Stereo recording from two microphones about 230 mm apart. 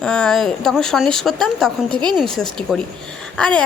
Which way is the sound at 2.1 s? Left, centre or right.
Centre.